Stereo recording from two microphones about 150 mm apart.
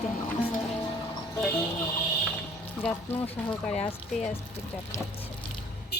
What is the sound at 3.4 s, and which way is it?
Speech, 45° left (ahead or behind).